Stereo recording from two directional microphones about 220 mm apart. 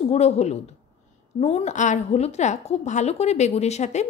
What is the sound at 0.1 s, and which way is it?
A woman's voice, 30° left (ahead or behind).